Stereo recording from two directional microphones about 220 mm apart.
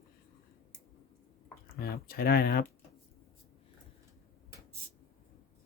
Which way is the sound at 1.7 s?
45° left (ahead or behind).